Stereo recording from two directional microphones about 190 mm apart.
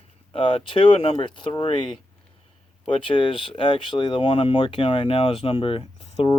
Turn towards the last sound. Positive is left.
turn(degrees=30)  # may be behind; listen again after turning